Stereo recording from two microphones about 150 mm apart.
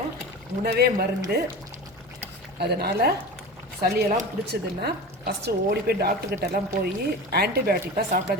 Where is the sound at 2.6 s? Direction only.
90° right.